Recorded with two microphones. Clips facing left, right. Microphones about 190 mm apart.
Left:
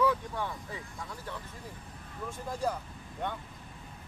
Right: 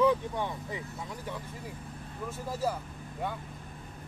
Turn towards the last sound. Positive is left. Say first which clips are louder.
# right 1 dB
turn(degrees=-5)  # may be behind; listen again after turning